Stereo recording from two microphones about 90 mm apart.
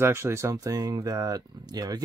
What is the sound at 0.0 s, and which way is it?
Speech, 30° right (ahead or behind).